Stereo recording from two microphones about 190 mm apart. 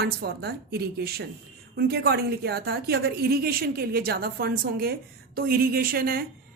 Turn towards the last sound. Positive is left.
turn(degrees=-50)  # may be behind; listen again after turning